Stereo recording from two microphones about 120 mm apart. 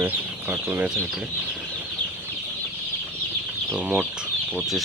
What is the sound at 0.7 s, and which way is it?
Speech, 20° right (ahead or behind).